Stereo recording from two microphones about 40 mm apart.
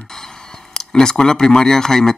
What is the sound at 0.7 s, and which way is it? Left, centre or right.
Speech, centre.